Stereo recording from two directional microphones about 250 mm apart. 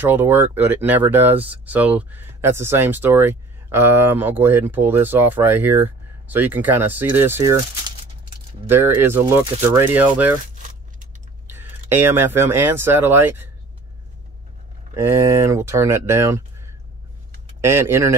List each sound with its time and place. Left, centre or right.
0.0 s speech: centre
8.6 s speech: centre
10.4 s a sound: right
11.4 s speech: centre
15.0 s speech: centre